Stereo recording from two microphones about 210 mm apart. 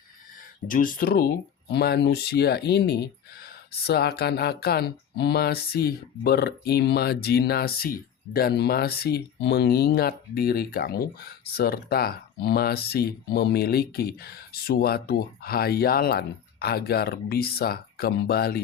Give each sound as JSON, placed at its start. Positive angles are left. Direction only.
{"t": 0.7, "sound": "speech", "side_deg": 40}